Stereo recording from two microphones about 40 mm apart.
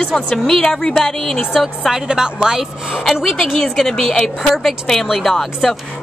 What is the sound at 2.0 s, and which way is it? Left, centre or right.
Speech, centre.